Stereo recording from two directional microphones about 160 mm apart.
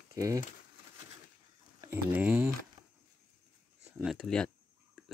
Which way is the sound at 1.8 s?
15° right (ahead or behind).